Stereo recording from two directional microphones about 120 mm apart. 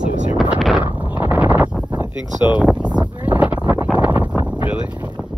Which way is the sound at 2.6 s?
10° right (ahead or behind).